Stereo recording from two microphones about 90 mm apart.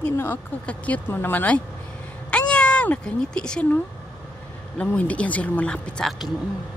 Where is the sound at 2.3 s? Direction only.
10° left (ahead or behind).